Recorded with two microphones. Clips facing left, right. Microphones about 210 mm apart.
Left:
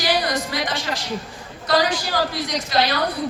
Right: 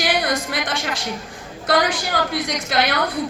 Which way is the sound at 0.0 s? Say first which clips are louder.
Right 1 dB; 50° right (ahead or behind).